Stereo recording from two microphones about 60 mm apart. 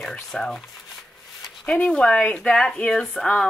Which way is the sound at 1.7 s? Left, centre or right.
Centre.